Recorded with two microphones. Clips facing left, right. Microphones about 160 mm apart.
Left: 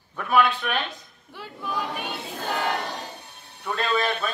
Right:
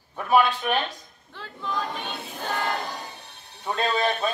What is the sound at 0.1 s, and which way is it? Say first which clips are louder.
Speech: right 1 dB; 25° right (ahead or behind).